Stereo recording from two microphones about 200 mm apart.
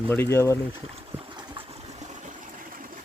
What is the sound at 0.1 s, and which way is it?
Speech, 10° left (ahead or behind).